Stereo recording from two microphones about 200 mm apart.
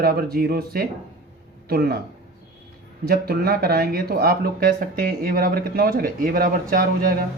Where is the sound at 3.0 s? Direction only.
50° right (ahead or behind).